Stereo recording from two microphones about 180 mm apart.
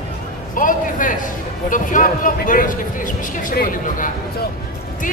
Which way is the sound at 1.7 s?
45° left (ahead or behind).